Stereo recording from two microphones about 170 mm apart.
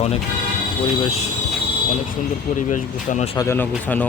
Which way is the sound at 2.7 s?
45° left (ahead or behind).